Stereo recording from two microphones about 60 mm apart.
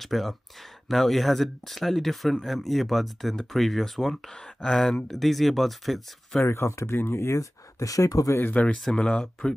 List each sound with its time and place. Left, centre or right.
0.0 s speech: centre
6.4 s speech: left
7.8 s speech: left
8.8 s speech: centre